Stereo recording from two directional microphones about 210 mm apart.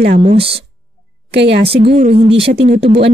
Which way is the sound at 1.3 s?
55° right (ahead or behind).